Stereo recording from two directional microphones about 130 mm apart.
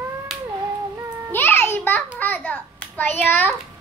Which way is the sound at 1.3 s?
15° left (ahead or behind).